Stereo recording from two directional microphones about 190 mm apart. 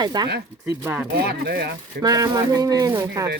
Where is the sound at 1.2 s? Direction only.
55° right (ahead or behind).